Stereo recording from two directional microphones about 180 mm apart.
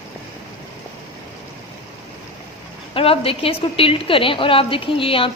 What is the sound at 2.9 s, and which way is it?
A woman's voice, 30° left (ahead or behind).